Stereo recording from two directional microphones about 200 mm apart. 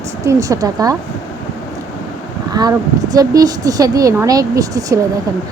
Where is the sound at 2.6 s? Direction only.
20° right (ahead or behind).